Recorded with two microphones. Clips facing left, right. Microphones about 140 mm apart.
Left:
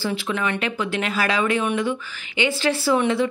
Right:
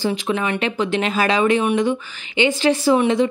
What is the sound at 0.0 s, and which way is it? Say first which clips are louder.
A woman's voice: right 3 dB; 20° right (ahead or behind).